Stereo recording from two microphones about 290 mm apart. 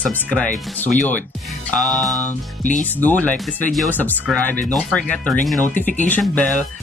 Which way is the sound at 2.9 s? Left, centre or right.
Centre.